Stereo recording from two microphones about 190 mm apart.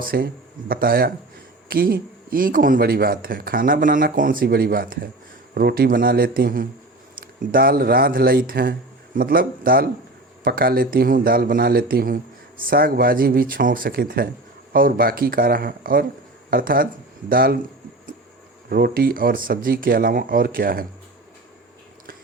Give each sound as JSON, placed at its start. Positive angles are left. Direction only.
{"t": 0.0, "sound": "speech", "side_deg": -50}
{"t": 18.7, "sound": "speech", "side_deg": -50}